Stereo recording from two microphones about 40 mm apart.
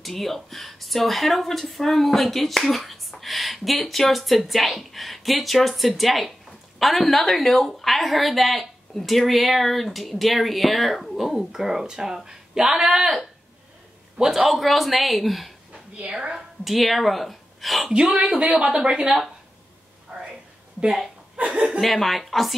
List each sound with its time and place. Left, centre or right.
0.0 s speech: centre
14.3 s a woman's voice: centre
17.9 s speech: centre
18.7 s a woman's voice: right
20.1 s a sound: centre
21.4 s speech: right
21.6 s speech: centre